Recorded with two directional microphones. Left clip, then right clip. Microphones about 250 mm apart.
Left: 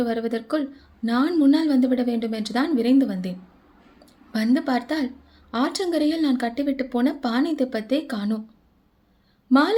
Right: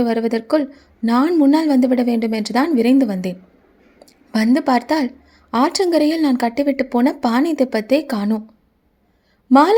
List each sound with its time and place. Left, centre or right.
0.0 s speech: right
9.5 s speech: right